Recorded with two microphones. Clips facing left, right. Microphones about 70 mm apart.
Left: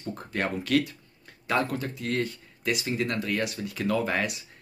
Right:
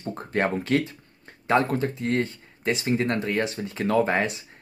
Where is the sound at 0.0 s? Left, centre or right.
Right.